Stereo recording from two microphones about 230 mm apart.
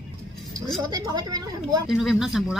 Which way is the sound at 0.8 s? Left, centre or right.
Centre.